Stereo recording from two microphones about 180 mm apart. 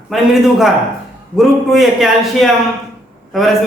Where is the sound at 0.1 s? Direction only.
Centre (ahead or behind).